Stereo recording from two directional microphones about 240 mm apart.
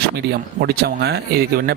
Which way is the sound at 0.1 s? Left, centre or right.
Right.